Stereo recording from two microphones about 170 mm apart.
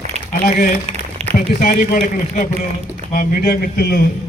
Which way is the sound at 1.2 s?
35° right (ahead or behind).